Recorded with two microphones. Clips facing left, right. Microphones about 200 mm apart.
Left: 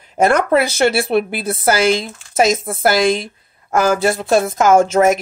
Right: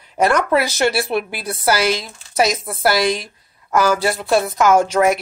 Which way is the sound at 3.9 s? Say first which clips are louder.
Left 3 dB; 25° left (ahead or behind).